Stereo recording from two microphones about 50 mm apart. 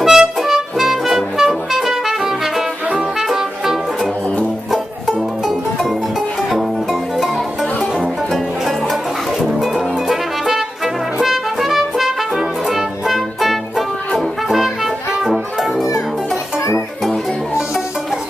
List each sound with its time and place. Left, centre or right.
0.0 s music: centre
8.3 s music: centre